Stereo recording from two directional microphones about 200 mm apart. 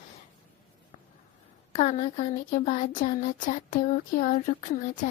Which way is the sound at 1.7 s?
35° left (ahead or behind).